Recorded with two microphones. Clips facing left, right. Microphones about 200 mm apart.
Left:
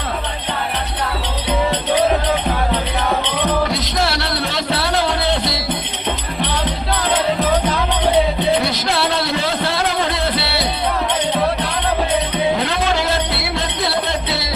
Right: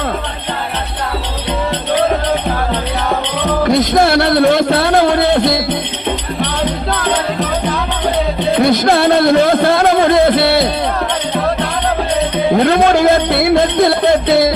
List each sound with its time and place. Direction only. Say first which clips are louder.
3.6 s music: right 8 dB; 50° right (ahead or behind)
8.6 s a sound: right 9 dB; 50° right (ahead or behind)
12.5 s music: right 9 dB; 50° right (ahead or behind)